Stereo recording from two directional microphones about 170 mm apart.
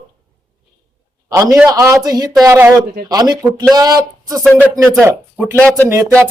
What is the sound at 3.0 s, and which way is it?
Speech, 25° right (ahead or behind).